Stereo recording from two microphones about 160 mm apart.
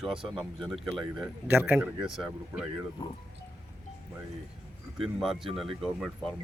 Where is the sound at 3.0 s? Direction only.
30° left (ahead or behind).